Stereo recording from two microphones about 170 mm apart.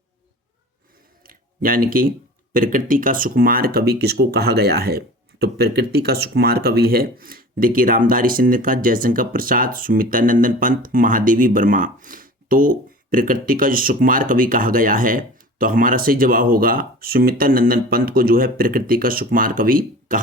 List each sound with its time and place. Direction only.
1.2 s speech: 55° right (ahead or behind)